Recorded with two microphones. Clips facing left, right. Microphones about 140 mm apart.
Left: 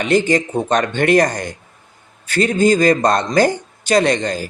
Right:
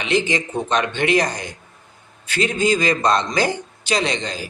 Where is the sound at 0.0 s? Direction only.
45° left (ahead or behind).